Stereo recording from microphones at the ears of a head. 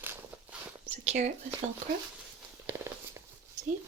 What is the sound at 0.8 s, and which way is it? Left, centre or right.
Speech, right.